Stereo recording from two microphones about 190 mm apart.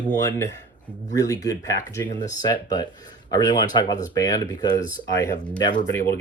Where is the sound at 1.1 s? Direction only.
20° left (ahead or behind).